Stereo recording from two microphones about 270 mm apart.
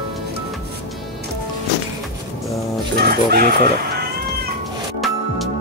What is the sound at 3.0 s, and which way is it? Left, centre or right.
Speech, right.